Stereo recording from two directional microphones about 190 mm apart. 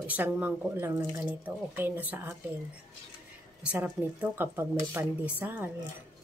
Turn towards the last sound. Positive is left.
turn(degrees=-10)  # may be behind; listen again after turning